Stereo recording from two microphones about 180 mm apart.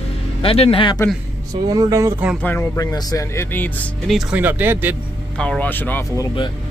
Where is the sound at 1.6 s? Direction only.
20° right (ahead or behind).